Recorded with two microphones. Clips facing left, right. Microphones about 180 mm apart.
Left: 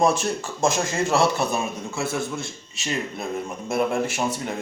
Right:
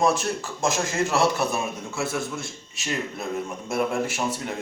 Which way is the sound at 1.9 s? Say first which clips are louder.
Left 1 dB; 25° left (ahead or behind).